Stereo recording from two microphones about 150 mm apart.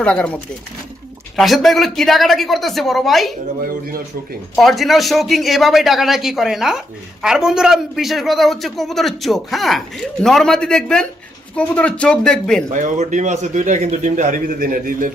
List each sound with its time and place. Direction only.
0.0 s speech: 5° left (ahead or behind)
1.4 s a man's voice: centre (ahead or behind)
4.5 s a man's voice: centre (ahead or behind)
12.7 s a man's voice: 55° right (ahead or behind)